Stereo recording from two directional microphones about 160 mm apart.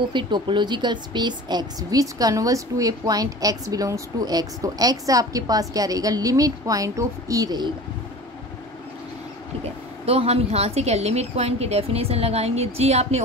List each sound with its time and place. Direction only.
0.1 s a woman's voice: 30° right (ahead or behind)
10.0 s a woman's voice: 40° right (ahead or behind)